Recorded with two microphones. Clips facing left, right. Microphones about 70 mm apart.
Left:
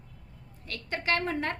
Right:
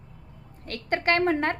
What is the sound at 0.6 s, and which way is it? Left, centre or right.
Speech, right.